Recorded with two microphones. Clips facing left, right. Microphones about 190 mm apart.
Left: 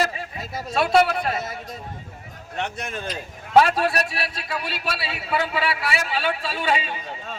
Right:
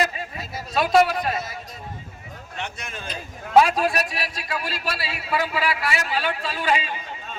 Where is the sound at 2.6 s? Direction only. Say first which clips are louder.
Left 5 dB; 60° left (ahead or behind).